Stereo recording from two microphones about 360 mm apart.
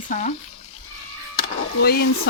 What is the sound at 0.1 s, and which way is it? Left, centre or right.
Speech, centre.